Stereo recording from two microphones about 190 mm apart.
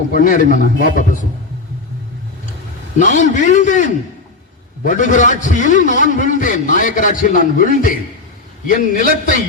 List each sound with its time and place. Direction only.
0.1 s a man's voice: 45° left (ahead or behind)
3.0 s a man's voice: 40° left (ahead or behind)